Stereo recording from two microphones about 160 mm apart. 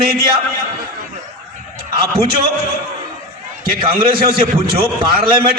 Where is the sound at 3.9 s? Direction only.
70° right (ahead or behind).